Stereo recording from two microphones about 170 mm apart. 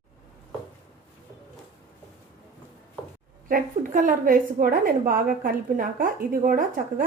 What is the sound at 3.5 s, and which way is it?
A woman's voice, 55° right (ahead or behind).